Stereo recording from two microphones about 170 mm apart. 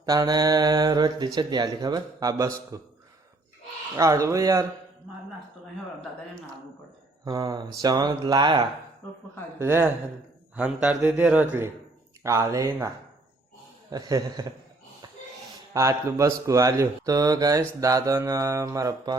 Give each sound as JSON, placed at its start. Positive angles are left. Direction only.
{"t": 0.0, "sound": "a man's voice", "side_deg": -20}
{"t": 3.9, "sound": "speech", "side_deg": -20}
{"t": 7.3, "sound": "speech", "side_deg": -20}
{"t": 9.6, "sound": "a man's voice", "side_deg": -15}
{"t": 13.9, "sound": "speech", "side_deg": -20}
{"t": 15.7, "sound": "speech", "side_deg": -20}